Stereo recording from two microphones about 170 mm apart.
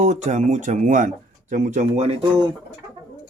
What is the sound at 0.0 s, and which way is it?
Speech, 45° right (ahead or behind).